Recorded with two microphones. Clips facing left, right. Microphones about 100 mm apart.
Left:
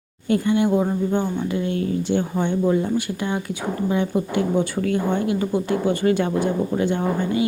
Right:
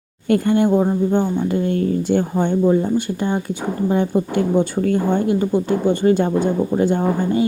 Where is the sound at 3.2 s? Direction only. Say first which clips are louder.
Right 4 dB; 30° right (ahead or behind).